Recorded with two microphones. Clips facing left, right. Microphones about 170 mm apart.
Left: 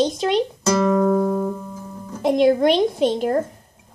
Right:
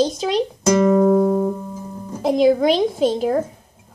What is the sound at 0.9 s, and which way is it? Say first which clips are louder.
Music: right 3 dB; 25° right (ahead or behind).